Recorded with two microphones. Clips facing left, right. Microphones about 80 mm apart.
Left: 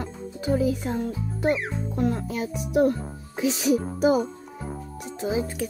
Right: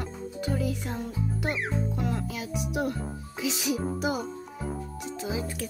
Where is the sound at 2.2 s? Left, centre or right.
Left.